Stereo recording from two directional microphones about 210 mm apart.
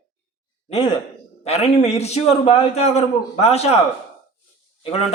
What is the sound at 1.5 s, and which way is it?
A man's voice, 30° left (ahead or behind).